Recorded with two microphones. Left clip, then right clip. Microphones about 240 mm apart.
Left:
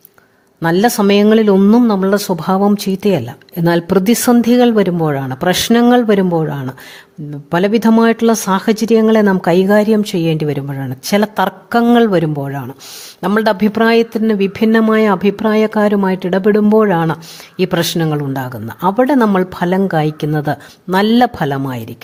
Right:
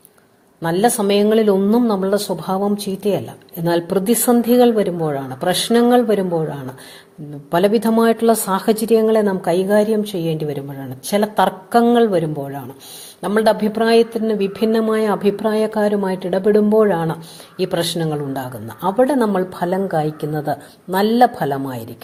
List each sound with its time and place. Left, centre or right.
0.6 s speech: left
7.5 s speech: left